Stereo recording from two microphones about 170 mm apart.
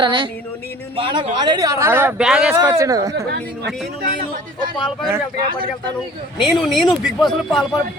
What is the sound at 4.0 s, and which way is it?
Speech, 65° right (ahead or behind).